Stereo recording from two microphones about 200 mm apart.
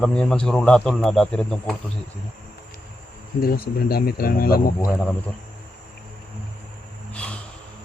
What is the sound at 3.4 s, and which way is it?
Speech, 50° left (ahead or behind).